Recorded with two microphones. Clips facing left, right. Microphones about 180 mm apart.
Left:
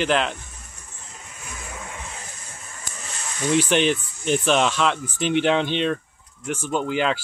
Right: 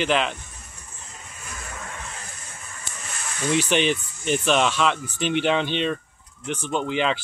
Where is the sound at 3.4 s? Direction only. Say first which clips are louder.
Left 2 dB; 10° left (ahead or behind).